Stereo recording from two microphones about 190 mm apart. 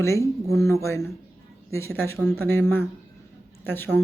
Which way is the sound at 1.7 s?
15° left (ahead or behind).